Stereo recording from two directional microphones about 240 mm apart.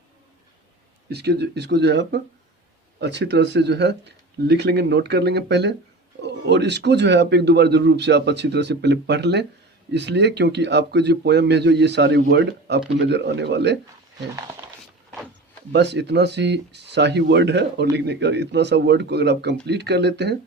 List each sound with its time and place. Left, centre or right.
1.1 s speech: right
15.7 s speech: right